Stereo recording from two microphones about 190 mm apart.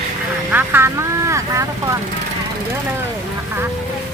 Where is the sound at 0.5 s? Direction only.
10° right (ahead or behind).